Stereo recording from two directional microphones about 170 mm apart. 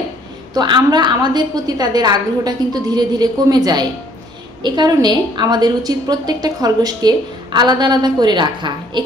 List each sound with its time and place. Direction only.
0.6 s a woman's voice: 25° right (ahead or behind)